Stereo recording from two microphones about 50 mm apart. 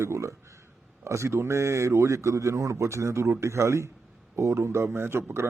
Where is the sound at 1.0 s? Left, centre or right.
Right.